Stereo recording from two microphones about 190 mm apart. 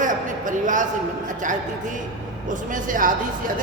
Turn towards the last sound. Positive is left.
turn(degrees=-45)  # may be behind; listen again after turning